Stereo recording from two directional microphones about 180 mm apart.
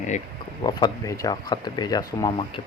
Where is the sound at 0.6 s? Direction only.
20° left (ahead or behind).